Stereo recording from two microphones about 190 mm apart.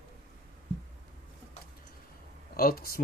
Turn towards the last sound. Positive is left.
turn(degrees=50)  # may be behind; listen again after turning